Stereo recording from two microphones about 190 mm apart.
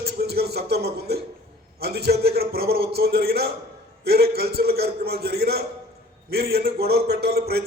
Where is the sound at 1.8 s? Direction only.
60° right (ahead or behind).